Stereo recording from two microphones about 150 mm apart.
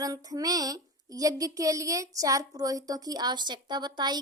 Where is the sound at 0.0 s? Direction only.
25° right (ahead or behind).